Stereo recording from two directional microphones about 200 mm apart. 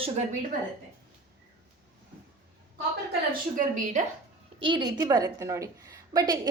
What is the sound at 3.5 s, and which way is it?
Speech, 40° right (ahead or behind).